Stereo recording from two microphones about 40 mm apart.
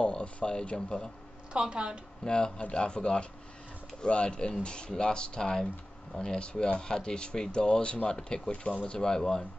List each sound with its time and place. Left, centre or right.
0.0 s speech: left
1.5 s a woman's voice: right
2.2 s speech: left